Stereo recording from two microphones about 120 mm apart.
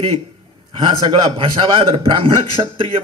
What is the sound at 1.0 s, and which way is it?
Speech, 40° right (ahead or behind).